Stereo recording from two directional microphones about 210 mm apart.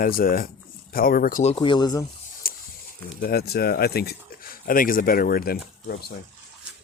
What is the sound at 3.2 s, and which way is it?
Speech, 45° left (ahead or behind).